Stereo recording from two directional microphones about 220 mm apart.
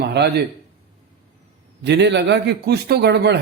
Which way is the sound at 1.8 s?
50° right (ahead or behind).